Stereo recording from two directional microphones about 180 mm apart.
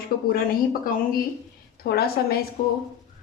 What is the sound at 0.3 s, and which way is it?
A woman's voice, 55° left (ahead or behind).